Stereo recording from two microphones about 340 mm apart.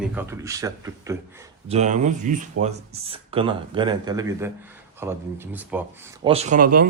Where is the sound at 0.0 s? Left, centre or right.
Centre.